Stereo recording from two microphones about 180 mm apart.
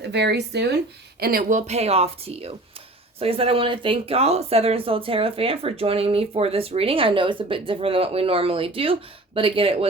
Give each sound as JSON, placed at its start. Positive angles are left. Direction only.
{"t": 0.0, "sound": "speech", "side_deg": -70}
{"t": 1.2, "sound": "speech", "side_deg": -50}